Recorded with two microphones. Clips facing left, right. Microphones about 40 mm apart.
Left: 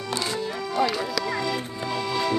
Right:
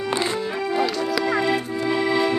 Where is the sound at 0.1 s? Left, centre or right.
Right.